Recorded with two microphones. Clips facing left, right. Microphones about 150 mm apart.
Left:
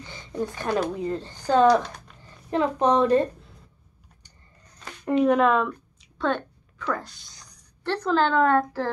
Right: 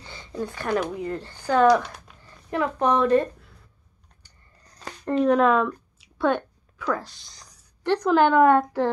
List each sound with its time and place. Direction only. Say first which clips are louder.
0.0 s a sound: left 2 dB; 15° left (ahead or behind)
1.0 s speech: left 1 dB; 15° left (ahead or behind)
1.7 s speech: right 1 dB; 10° right (ahead or behind)
2.2 s a woman's voice: left 2 dB; 20° left (ahead or behind)
4.6 s a sound: right 3 dB; 35° right (ahead or behind)
5.0 s speech: even; 5° left (ahead or behind)
5.9 s a sound: right 3 dB; 10° right (ahead or behind)
7.0 s speech: right 1 dB; centre (ahead or behind)
7.8 s a woman's voice: right 4 dB; 15° right (ahead or behind)